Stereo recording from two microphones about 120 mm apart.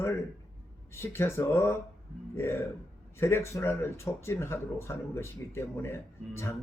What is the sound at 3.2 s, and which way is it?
Speech, 20° left (ahead or behind).